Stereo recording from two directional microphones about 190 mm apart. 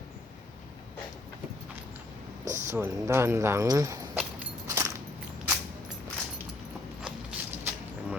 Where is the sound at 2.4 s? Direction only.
40° right (ahead or behind).